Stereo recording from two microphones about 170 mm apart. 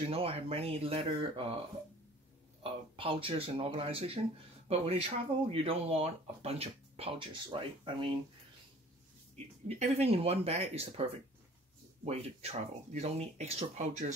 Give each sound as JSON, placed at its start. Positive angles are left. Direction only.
{"t": 0.0, "sound": "speech", "side_deg": -35}
{"t": 2.6, "sound": "speech", "side_deg": -30}
{"t": 9.3, "sound": "speech", "side_deg": -40}